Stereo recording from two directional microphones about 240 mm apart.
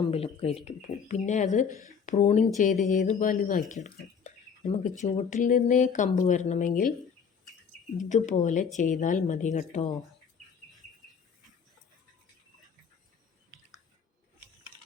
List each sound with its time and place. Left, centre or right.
0.1 s speech: left
7.9 s speech: left